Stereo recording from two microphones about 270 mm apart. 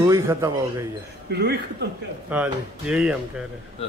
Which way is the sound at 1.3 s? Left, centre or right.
Right.